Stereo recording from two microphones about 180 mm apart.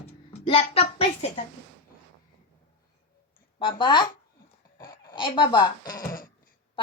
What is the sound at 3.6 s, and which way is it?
A child's voice, 25° left (ahead or behind).